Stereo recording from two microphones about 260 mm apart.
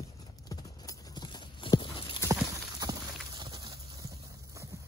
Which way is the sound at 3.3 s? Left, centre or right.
Centre.